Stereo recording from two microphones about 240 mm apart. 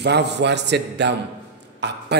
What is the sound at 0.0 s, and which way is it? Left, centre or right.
A man's voice, right.